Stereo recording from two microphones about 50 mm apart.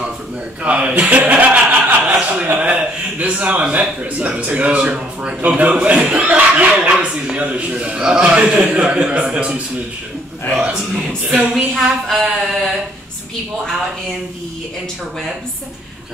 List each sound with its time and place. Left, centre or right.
0.7 s chuckle: right
2.6 s a man's voice: right
6.2 s a man's voice: right
10.5 s a man's voice: centre
11.7 s a sound: centre